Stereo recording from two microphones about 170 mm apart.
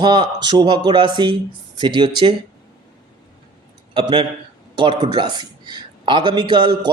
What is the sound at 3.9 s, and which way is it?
Speech, 30° right (ahead or behind).